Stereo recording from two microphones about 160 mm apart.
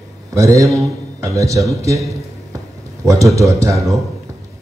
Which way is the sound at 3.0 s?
20° right (ahead or behind).